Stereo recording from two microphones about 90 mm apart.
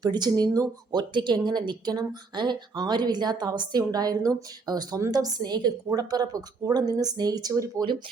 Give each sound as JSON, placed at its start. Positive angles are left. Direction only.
{"t": 0.0, "sound": "speech", "side_deg": -50}